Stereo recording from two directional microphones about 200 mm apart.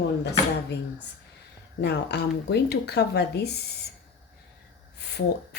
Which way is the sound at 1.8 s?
55° left (ahead or behind).